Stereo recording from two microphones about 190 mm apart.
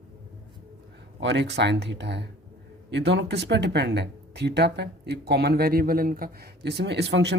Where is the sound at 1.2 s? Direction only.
65° right (ahead or behind).